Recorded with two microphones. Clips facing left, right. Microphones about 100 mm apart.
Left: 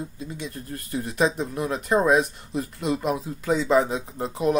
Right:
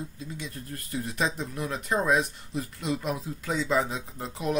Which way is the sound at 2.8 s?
45° left (ahead or behind).